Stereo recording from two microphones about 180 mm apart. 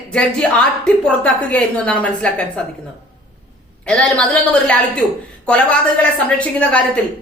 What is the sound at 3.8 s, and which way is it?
A woman's voice, 5° left (ahead or behind).